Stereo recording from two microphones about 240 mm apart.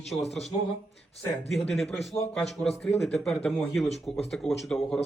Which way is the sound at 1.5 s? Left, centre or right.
Centre.